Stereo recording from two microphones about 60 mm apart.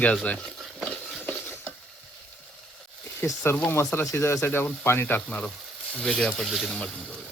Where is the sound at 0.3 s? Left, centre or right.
Centre.